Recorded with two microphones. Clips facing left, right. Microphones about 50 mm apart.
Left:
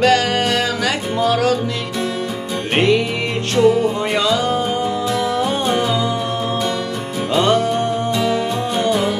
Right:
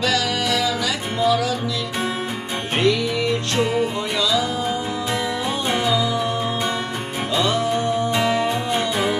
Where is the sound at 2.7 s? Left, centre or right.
Left.